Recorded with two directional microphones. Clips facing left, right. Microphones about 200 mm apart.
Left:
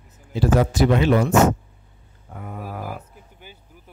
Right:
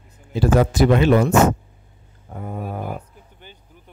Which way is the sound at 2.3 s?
30° right (ahead or behind).